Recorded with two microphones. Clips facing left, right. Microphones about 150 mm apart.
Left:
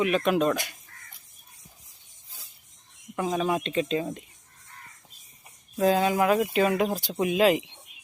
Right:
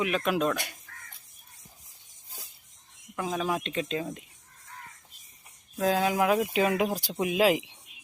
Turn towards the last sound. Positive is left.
turn(degrees=-5)  # may be behind; listen again after turning